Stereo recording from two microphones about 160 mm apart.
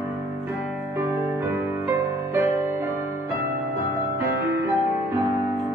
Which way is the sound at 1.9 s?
15° right (ahead or behind).